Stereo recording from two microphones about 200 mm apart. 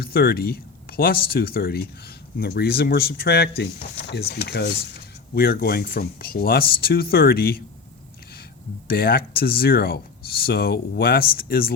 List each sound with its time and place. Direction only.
0.0 s speech: 50° left (ahead or behind)
8.9 s speech: 50° left (ahead or behind)